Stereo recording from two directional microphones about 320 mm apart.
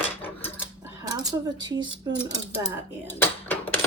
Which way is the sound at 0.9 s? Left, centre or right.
Centre.